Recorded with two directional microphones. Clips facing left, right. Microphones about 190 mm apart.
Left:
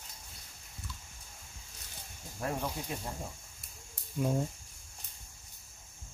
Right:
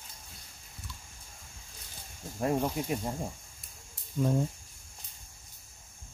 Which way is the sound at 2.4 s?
20° right (ahead or behind).